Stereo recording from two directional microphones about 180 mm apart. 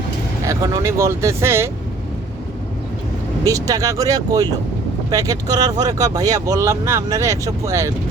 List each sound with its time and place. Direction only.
0.4 s speech: 20° right (ahead or behind)
3.4 s speech: 20° right (ahead or behind)